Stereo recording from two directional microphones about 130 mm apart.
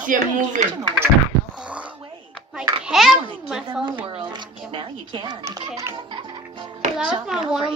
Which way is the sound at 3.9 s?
40° right (ahead or behind).